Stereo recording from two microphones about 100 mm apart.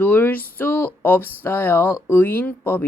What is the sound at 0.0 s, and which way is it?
Speech, 15° left (ahead or behind).